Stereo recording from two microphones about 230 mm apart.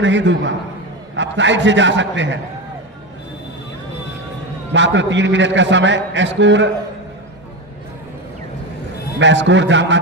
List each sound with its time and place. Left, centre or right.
0.0 s a man's voice: right
4.7 s a man's voice: right
9.1 s a man's voice: right